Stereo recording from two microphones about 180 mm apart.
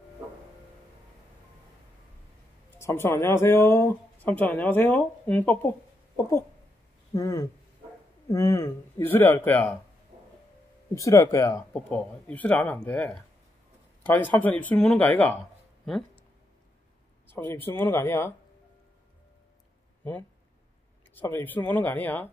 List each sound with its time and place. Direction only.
2.8 s speech: 15° left (ahead or behind)
7.2 s speech: 15° left (ahead or behind)
11.0 s speech: 15° left (ahead or behind)
17.3 s speech: 10° left (ahead or behind)
21.2 s speech: 10° left (ahead or behind)